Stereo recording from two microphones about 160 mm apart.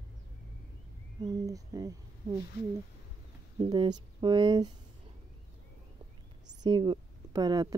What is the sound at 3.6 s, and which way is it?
Speech, 30° right (ahead or behind).